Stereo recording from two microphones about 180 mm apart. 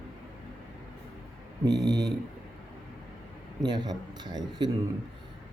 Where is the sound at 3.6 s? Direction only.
25° right (ahead or behind).